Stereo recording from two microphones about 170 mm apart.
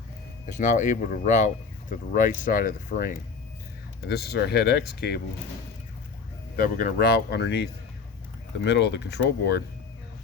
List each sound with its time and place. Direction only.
0.4 s speech: 50° left (ahead or behind)
4.0 s speech: 70° left (ahead or behind)
6.6 s speech: 55° left (ahead or behind); by 7.7 s 75° left (ahead or behind)
8.6 s speech: 90° left